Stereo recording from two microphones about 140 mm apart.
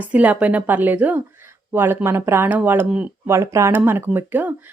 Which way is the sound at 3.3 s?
20° right (ahead or behind).